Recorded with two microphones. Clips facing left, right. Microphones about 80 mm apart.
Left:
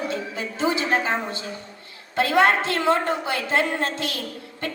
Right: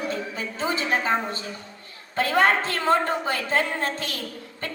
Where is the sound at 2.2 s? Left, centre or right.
Right.